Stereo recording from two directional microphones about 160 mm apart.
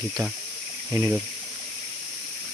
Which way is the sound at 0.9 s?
15° right (ahead or behind).